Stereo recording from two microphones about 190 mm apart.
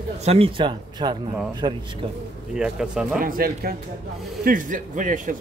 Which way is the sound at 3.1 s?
50° right (ahead or behind).